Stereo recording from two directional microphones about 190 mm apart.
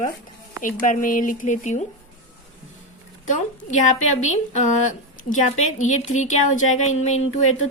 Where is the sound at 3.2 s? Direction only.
40° left (ahead or behind).